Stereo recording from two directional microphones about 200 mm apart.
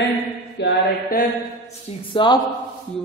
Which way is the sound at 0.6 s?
60° left (ahead or behind).